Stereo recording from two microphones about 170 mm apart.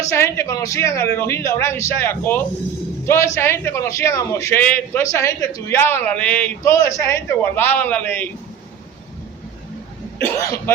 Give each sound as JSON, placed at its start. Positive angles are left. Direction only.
{"t": 0.0, "sound": "a man's voice", "side_deg": 15}
{"t": 10.3, "sound": "speech", "side_deg": 20}